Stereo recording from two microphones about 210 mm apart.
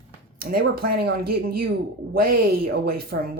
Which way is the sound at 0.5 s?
45° right (ahead or behind).